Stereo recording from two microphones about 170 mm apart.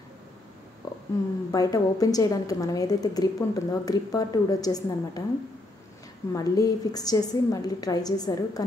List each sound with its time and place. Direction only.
0.8 s a sound: 20° left (ahead or behind)
1.5 s a woman's voice: 20° left (ahead or behind)
6.3 s a woman's voice: 20° left (ahead or behind)